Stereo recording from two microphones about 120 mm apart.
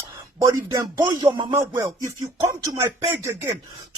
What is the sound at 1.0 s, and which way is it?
Speech, 35° right (ahead or behind).